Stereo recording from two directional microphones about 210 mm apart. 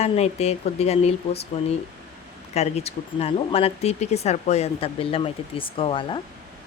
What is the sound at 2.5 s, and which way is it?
Speech, 30° left (ahead or behind).